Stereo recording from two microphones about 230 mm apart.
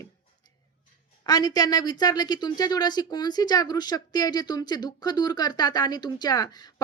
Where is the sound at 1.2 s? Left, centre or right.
Centre.